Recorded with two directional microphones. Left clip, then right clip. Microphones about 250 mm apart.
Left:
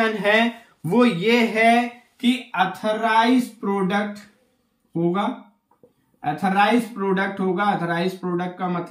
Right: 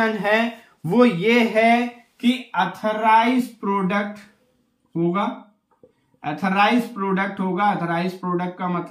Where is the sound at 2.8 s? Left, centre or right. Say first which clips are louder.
Right 4 dB; centre.